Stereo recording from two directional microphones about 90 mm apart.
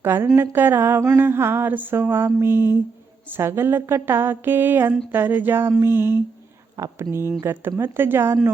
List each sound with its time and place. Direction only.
0.0 s a woman's voice: 25° right (ahead or behind)
0.3 s mantra: 25° right (ahead or behind)
6.7 s speech: 35° right (ahead or behind)
7.4 s mantra: 25° right (ahead or behind)